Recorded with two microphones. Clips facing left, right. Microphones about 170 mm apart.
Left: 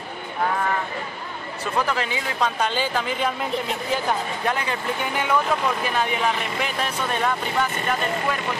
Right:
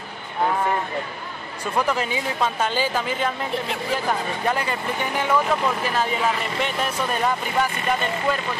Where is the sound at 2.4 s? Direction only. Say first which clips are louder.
Even; 5° right (ahead or behind).